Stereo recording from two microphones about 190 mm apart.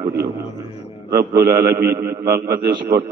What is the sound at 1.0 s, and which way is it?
A man's voice, 55° right (ahead or behind).